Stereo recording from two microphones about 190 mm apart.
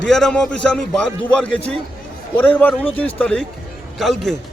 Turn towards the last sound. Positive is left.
turn(degrees=0)  # may be behind; listen again after turning